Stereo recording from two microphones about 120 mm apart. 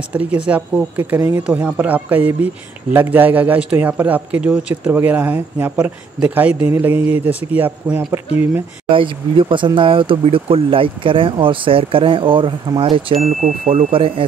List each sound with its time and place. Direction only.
0.1 s speech: 10° right (ahead or behind)
8.9 s speech: 45° right (ahead or behind)
13.4 s speech: 80° right; by 14.2 s 50° right (ahead or behind)